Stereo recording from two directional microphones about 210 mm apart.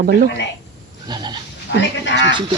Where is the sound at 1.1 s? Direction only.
20° right (ahead or behind).